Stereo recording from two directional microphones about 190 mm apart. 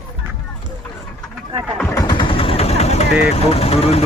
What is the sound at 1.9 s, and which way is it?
Vehicle, 20° left (ahead or behind).